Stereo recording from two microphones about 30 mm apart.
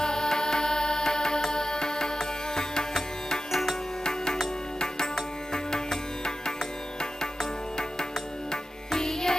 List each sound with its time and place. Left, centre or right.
0.0 s music: left